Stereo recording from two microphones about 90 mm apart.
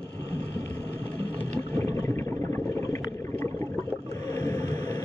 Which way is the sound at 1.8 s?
35° left (ahead or behind).